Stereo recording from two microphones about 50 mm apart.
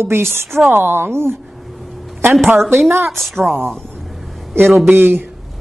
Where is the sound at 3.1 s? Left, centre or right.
Centre.